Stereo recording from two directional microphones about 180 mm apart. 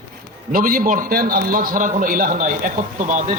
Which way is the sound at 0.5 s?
50° right (ahead or behind).